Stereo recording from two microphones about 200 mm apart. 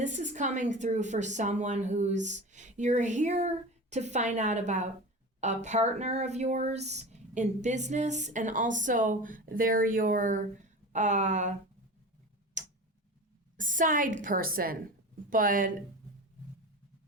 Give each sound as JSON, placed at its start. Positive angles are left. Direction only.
{"t": 0.0, "sound": "speech", "side_deg": -35}
{"t": 12.6, "sound": "tick-tock", "side_deg": -35}
{"t": 13.6, "sound": "speech", "side_deg": -40}